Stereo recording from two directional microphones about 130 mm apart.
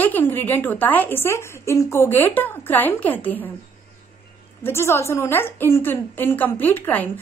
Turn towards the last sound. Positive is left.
turn(degrees=15)  # may be behind; listen again after turning